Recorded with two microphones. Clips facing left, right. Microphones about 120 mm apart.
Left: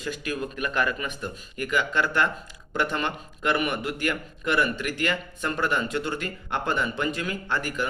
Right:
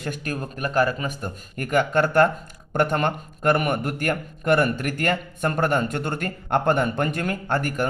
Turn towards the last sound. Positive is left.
turn(degrees=-50)  # may be behind; listen again after turning